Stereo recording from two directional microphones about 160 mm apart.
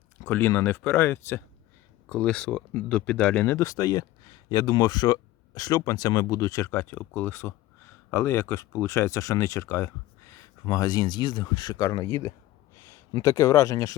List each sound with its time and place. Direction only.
0.3 s speech: 10° left (ahead or behind)